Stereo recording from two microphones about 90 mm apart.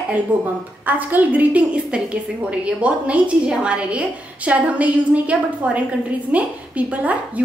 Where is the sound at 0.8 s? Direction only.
20° right (ahead or behind).